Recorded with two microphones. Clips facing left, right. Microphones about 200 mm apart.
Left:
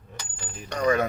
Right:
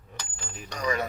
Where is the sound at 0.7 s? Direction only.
55° left (ahead or behind).